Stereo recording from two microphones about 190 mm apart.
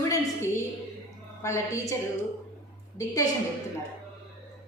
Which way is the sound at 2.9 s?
20° left (ahead or behind).